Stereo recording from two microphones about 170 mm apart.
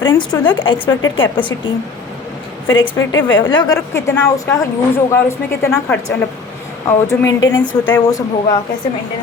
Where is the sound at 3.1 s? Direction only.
90° left.